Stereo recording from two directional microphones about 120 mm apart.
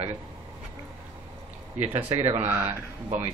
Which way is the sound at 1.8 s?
60° right (ahead or behind).